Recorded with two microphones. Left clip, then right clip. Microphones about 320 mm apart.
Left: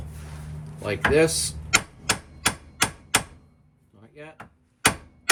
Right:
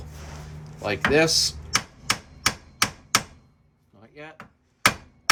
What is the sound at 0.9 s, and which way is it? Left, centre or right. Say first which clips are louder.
Speech: even; centre.